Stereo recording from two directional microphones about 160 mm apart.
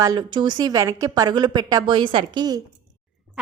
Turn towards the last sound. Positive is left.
turn(degrees=-5)  # may be behind; listen again after turning